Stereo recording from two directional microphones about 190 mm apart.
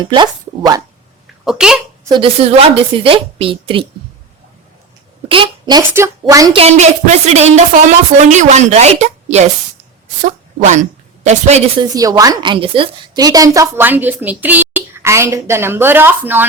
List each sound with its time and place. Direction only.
0.0 s a woman's voice: 25° right (ahead or behind)
1.5 s speech: 5° right (ahead or behind)
2.0 s a woman's voice: 25° right (ahead or behind)
5.3 s a woman's voice: 25° right (ahead or behind)
6.6 s speech: 35° right (ahead or behind)
11.8 s a woman's voice: 20° right (ahead or behind)